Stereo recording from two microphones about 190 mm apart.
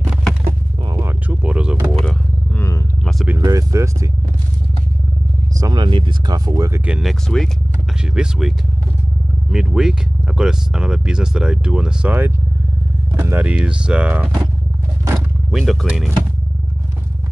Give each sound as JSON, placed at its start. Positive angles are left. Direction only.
{"t": 0.1, "sound": "a sound", "side_deg": 0}
{"t": 2.0, "sound": "roaring cats", "side_deg": 10}
{"t": 3.3, "sound": "vehicle", "side_deg": -15}
{"t": 5.6, "sound": "speech", "side_deg": -25}
{"t": 6.9, "sound": "speech", "side_deg": 0}
{"t": 15.5, "sound": "speech", "side_deg": 0}